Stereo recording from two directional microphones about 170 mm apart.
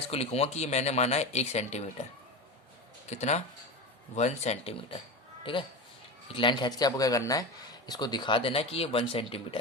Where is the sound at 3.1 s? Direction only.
40° left (ahead or behind).